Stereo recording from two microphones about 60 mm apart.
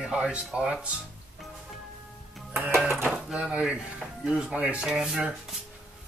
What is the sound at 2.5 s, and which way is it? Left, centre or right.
Music, right.